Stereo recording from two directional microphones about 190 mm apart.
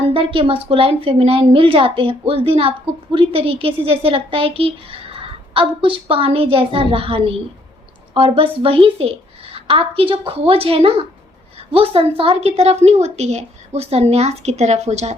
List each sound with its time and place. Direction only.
0.0 s a woman's voice: 30° right (ahead or behind)